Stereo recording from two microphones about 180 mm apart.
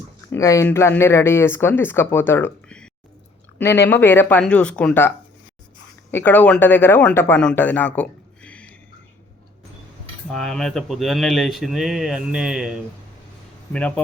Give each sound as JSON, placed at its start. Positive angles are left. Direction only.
{"t": 0.3, "sound": "speech", "side_deg": 15}
{"t": 3.6, "sound": "speech", "side_deg": 70}
{"t": 4.0, "sound": "speech", "side_deg": 10}
{"t": 10.3, "sound": "speech", "side_deg": 5}
{"t": 13.7, "sound": "speech", "side_deg": 5}